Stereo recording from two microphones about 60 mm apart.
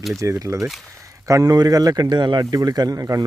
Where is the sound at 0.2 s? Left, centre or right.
Right.